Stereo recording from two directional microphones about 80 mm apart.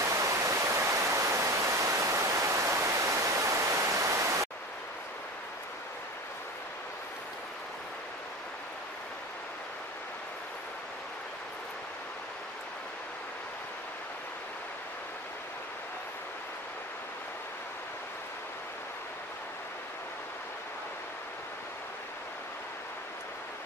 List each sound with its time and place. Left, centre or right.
0.0 s waterfall: right